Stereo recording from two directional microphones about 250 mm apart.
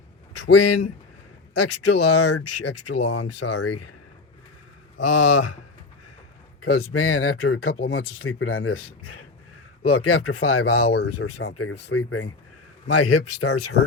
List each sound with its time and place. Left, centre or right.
0.3 s speech: left
1.5 s speech: left
3.0 s speech: left
3.2 s speech: left
5.0 s speech: left
6.6 s speech: left
10.8 s speech: left
11.1 s speech: left